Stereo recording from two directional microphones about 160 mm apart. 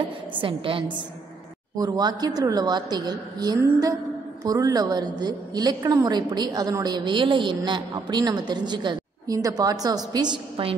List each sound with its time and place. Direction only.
0.3 s a woman's voice: 35° right (ahead or behind)